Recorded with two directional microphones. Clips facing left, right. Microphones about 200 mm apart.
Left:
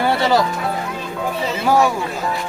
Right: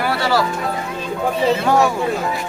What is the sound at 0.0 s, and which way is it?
Music, 20° left (ahead or behind).